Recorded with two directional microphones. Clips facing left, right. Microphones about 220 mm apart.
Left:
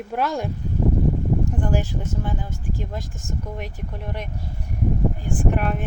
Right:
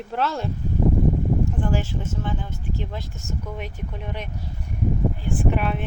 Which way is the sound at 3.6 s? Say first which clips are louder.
Even; 10° left (ahead or behind).